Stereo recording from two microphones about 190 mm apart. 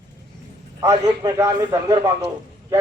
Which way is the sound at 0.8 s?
15° right (ahead or behind).